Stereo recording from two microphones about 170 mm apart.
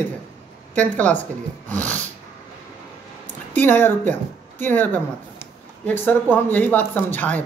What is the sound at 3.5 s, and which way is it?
Speech, 10° left (ahead or behind).